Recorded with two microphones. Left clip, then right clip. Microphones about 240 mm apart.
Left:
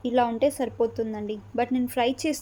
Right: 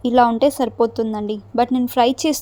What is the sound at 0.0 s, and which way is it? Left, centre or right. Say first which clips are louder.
A woman's voice: right 8 dB; right.